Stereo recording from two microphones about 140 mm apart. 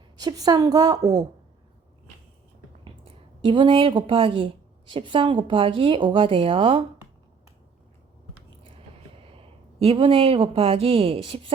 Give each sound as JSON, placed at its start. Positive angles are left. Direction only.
{"t": 0.2, "sound": "a woman's voice", "side_deg": -30}
{"t": 2.8, "sound": "speech", "side_deg": -40}
{"t": 9.1, "sound": "speech", "side_deg": -40}